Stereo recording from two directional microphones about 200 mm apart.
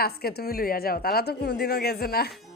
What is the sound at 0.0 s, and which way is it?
A woman's voice, 50° left (ahead or behind).